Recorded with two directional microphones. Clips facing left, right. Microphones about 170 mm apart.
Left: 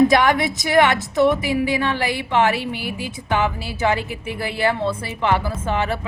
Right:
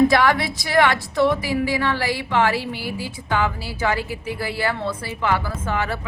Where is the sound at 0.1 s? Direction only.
20° left (ahead or behind).